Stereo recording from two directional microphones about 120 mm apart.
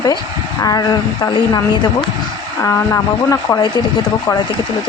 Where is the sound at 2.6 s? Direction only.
25° left (ahead or behind).